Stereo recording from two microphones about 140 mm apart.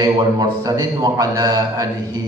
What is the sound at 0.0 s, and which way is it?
A man's voice, 25° right (ahead or behind).